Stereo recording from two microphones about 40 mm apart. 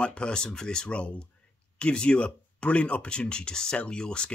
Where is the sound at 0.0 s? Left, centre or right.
Left.